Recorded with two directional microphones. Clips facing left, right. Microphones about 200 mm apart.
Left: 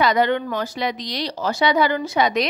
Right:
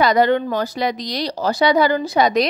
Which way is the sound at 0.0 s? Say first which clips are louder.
Right 3 dB; 40° right (ahead or behind).